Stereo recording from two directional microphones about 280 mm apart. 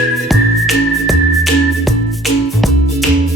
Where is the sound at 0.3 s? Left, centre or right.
Centre.